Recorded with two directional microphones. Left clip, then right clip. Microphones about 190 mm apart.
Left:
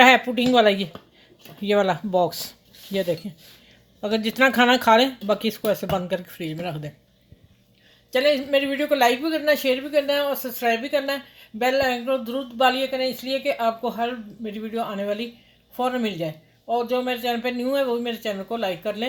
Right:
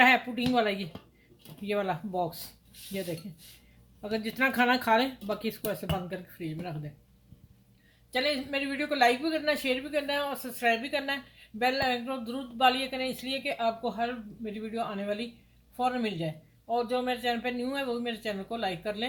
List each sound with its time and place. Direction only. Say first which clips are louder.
0.0 s speech: left 8 dB; 45° left (ahead or behind)
4.0 s speech: left 9 dB; 50° left (ahead or behind)
8.1 s speech: left 10 dB; 45° left (ahead or behind)